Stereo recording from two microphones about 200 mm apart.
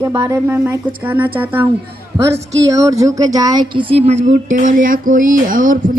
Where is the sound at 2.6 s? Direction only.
15° right (ahead or behind).